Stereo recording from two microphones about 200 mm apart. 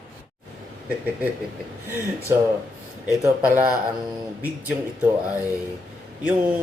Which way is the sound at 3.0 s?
10° right (ahead or behind).